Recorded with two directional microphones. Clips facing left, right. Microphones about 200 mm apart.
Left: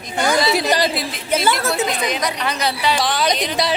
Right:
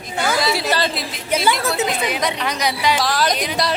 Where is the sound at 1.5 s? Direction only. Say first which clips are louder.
Even; centre (ahead or behind).